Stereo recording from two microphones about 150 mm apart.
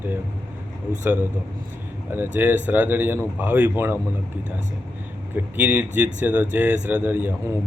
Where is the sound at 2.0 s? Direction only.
15° right (ahead or behind).